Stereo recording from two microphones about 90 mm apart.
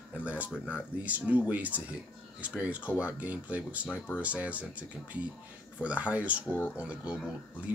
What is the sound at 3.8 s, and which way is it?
Speech, 20° left (ahead or behind).